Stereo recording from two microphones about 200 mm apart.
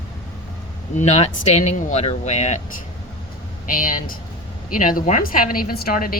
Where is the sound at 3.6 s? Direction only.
45° left (ahead or behind).